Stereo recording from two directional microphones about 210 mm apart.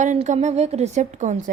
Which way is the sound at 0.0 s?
35° right (ahead or behind).